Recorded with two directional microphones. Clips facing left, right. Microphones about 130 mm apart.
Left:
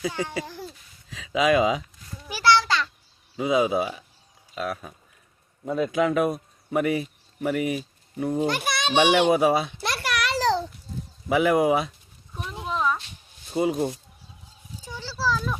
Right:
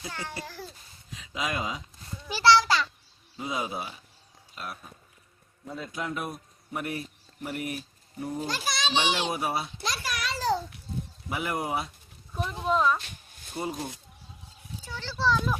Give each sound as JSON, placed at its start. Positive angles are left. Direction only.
{"t": 0.1, "sound": "speech", "side_deg": 15}
{"t": 1.1, "sound": "speech", "side_deg": 90}
{"t": 2.6, "sound": "a sound", "side_deg": -5}
{"t": 3.3, "sound": "speech", "side_deg": 90}
{"t": 5.6, "sound": "a child's voice", "side_deg": 70}
{"t": 9.8, "sound": "a sound", "side_deg": 65}
{"t": 11.3, "sound": "speech", "side_deg": 90}
{"t": 12.3, "sound": "speech", "side_deg": 0}
{"t": 12.7, "sound": "a sound", "side_deg": 0}
{"t": 13.0, "sound": "a sound", "side_deg": -55}
{"t": 13.6, "sound": "speech", "side_deg": 90}
{"t": 14.8, "sound": "children playing", "side_deg": 15}